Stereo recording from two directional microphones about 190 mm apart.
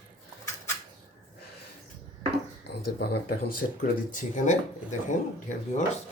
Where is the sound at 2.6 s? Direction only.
60° left (ahead or behind); by 5.8 s 40° left (ahead or behind).